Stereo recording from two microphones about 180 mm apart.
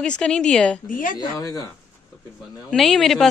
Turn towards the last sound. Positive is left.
turn(degrees=0)  # may be behind; listen again after turning